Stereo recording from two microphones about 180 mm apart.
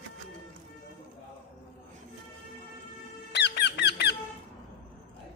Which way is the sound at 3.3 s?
70° left (ahead or behind).